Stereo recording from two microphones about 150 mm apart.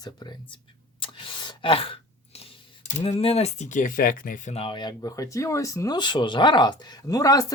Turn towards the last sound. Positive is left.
turn(degrees=25)  # may be behind; listen again after turning